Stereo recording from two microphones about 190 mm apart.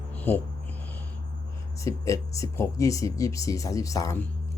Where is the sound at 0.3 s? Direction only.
10° left (ahead or behind).